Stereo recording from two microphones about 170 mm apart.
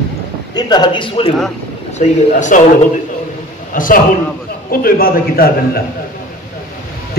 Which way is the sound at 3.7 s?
55° left (ahead or behind).